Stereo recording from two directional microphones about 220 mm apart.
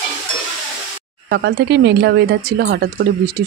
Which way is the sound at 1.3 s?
50° right (ahead or behind).